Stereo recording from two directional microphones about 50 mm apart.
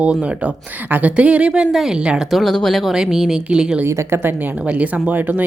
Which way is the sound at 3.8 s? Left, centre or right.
Right.